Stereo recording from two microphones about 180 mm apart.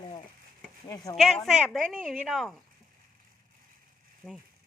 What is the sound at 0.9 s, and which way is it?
Speech, 20° left (ahead or behind).